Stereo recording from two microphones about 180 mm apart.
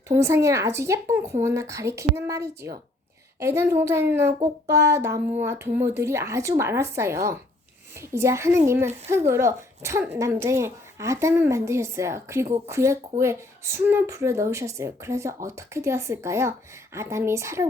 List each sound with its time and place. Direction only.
0.1 s speech: 15° right (ahead or behind)